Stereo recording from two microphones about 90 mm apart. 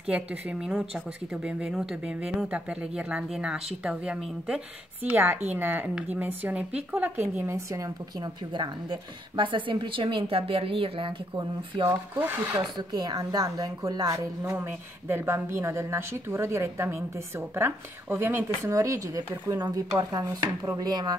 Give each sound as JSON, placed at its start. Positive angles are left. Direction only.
{"t": 0.0, "sound": "speech", "side_deg": -10}
{"t": 5.0, "sound": "a woman's voice", "side_deg": -20}
{"t": 8.2, "sound": "a woman's voice", "side_deg": -55}
{"t": 12.4, "sound": "a woman's voice", "side_deg": -50}
{"t": 18.7, "sound": "speech", "side_deg": -35}